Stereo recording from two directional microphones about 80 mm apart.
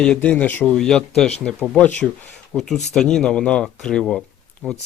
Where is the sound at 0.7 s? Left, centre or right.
Centre.